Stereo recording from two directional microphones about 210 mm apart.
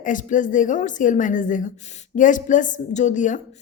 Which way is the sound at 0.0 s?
40° left (ahead or behind).